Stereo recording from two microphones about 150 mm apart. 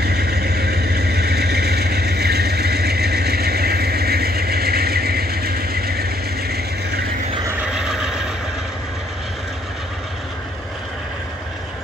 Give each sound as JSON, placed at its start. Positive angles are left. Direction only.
{"t": 0.0, "sound": "vehicle", "side_deg": -90}
{"t": 7.6, "sound": "neigh", "side_deg": -5}